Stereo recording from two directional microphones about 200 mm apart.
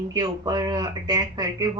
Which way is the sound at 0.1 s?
20° right (ahead or behind).